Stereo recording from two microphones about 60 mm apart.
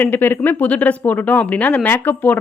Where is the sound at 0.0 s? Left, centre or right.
Left.